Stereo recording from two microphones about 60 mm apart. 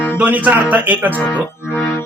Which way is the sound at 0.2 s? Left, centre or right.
Right.